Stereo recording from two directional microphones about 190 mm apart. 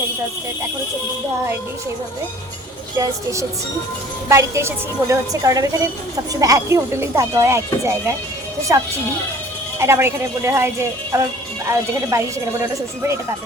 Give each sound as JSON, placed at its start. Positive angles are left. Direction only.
{"t": 3.0, "sound": "speech", "side_deg": -15}
{"t": 9.7, "sound": "speech", "side_deg": -15}